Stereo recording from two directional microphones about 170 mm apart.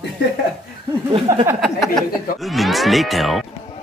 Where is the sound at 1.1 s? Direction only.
30° right (ahead or behind).